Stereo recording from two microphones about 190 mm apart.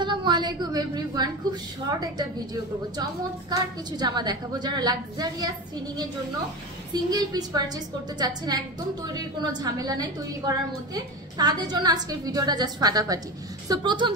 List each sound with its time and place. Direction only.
0.0 s a woman's voice: 25° right (ahead or behind)
6.9 s a woman's voice: 20° right (ahead or behind)